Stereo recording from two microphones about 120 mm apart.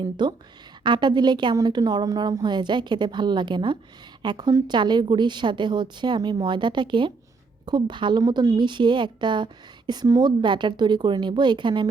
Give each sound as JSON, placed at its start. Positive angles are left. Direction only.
{"t": 0.0, "sound": "speech", "side_deg": -40}